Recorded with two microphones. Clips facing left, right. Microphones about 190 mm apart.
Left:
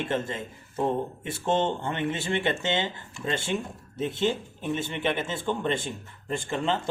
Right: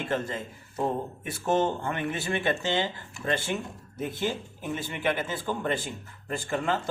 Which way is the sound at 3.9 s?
25° left (ahead or behind).